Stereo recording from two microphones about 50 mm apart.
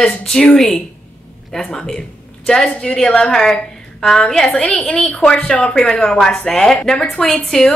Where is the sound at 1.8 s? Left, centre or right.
Centre.